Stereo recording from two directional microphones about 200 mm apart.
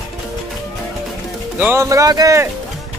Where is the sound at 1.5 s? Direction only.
10° right (ahead or behind).